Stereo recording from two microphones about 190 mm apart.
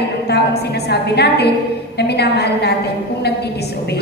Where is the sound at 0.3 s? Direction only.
60° left (ahead or behind).